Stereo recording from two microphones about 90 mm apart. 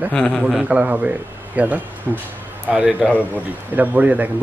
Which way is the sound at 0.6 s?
15° right (ahead or behind).